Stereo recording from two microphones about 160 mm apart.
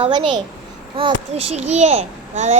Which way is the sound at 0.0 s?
30° right (ahead or behind).